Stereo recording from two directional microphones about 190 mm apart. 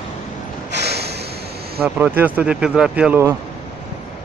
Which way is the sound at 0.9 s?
60° right (ahead or behind).